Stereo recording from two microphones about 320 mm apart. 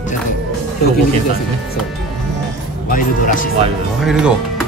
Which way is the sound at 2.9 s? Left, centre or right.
Left.